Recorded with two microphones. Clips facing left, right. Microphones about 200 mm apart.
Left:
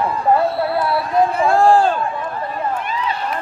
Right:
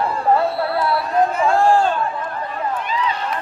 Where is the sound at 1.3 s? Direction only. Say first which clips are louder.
Left 3 dB; 30° left (ahead or behind).